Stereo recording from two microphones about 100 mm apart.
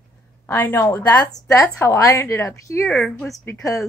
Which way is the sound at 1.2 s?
40° left (ahead or behind).